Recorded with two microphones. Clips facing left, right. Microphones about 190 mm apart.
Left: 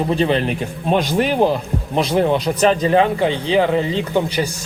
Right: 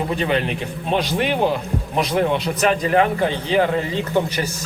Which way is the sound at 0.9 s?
45° left (ahead or behind).